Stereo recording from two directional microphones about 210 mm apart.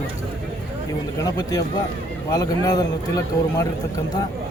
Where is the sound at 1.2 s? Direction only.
15° left (ahead or behind).